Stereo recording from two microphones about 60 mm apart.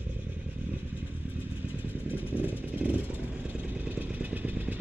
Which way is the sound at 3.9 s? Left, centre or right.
Right.